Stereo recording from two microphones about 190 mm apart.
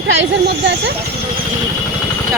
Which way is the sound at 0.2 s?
65° right (ahead or behind).